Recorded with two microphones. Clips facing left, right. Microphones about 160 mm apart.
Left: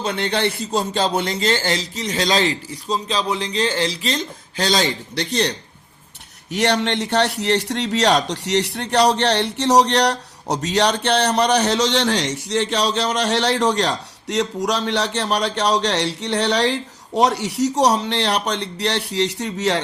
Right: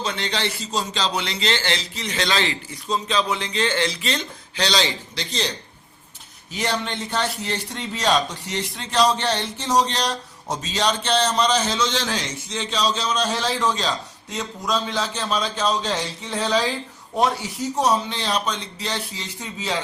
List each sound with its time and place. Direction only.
0.0 s a man's voice: 55° left (ahead or behind)
5.1 s a man's voice: 65° left (ahead or behind)